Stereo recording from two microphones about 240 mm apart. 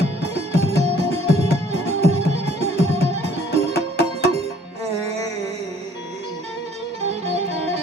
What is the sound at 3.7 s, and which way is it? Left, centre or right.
Music, left.